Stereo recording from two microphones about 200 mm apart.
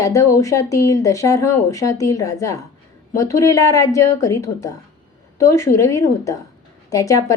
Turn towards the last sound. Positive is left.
turn(degrees=15)  # may be behind; listen again after turning